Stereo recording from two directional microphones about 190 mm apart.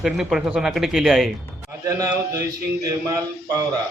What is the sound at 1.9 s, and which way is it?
Speech, 15° right (ahead or behind).